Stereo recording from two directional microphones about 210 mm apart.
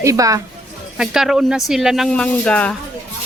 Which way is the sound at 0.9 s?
5° right (ahead or behind).